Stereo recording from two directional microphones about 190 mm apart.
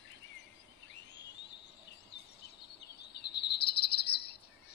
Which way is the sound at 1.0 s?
65° left (ahead or behind).